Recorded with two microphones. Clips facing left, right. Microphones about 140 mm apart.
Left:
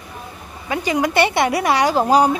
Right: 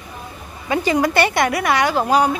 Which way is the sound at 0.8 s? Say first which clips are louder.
Even; 15° left (ahead or behind).